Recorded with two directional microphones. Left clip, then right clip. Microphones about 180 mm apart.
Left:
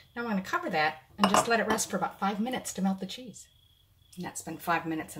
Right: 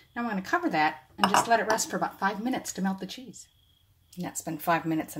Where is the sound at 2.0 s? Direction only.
40° right (ahead or behind).